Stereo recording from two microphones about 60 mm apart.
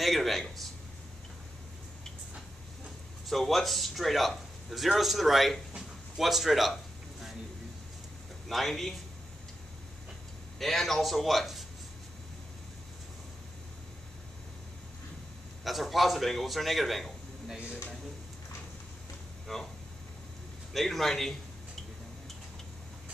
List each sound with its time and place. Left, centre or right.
0.0 s a sound: centre
3.3 s speech: centre
5.8 s a sound: centre
8.5 s speech: centre
10.6 s speech: centre
15.6 s a man's voice: centre
19.4 s speech: centre
20.7 s speech: centre